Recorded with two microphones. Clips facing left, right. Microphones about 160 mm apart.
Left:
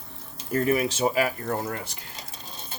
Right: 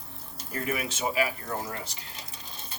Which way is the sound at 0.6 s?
35° left (ahead or behind).